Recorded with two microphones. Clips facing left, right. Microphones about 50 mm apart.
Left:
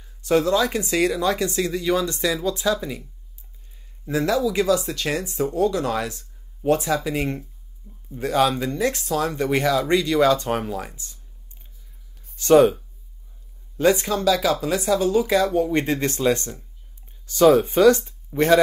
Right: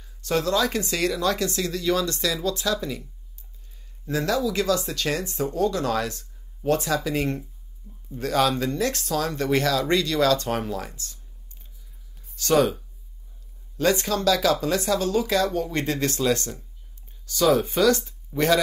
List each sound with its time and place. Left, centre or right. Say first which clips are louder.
0.0 s speech: left 5 dB; centre
4.3 s speech: left 3 dB; centre
12.4 s speech: left 6 dB; left
13.7 s speech: left 3 dB; centre